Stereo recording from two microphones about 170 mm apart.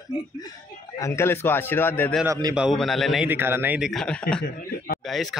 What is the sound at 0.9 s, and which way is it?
A man's voice, 15° left (ahead or behind).